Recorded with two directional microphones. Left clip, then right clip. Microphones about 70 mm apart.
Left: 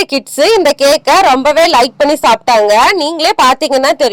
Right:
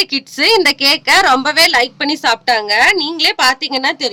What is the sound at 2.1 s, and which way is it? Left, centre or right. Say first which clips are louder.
A woman's voice: left 4 dB; left.